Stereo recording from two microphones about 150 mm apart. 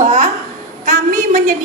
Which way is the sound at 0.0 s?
55° right (ahead or behind).